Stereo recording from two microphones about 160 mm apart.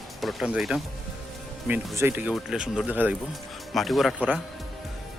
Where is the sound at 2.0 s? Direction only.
15° right (ahead or behind).